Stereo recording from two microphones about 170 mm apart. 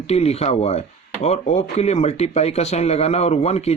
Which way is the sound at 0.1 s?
35° left (ahead or behind).